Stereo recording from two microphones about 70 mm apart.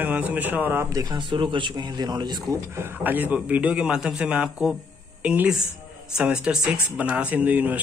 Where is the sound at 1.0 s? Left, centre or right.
Right.